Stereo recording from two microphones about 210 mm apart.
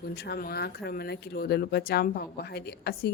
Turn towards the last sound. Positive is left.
turn(degrees=50)  # may be behind; listen again after turning